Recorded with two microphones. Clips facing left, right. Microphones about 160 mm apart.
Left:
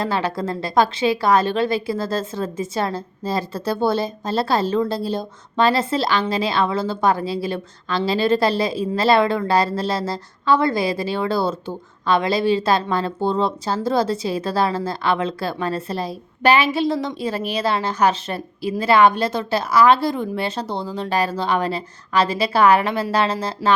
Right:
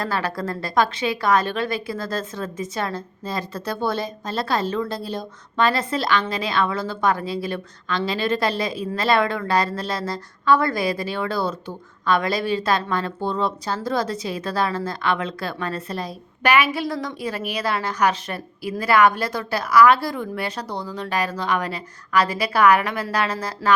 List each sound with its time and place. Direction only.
0.0 s a woman's voice: 25° left (ahead or behind)